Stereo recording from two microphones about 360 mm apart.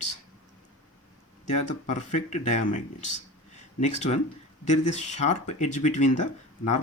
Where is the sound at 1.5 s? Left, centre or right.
Centre.